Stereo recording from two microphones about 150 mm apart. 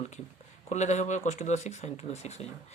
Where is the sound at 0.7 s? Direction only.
50° left (ahead or behind).